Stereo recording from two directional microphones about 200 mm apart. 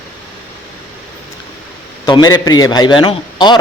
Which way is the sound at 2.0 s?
20° left (ahead or behind).